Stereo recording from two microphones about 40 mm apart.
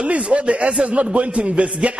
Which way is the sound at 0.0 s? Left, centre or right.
Right.